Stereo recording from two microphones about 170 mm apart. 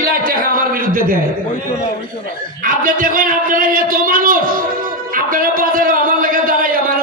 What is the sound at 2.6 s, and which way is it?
A man's voice, 55° right (ahead or behind).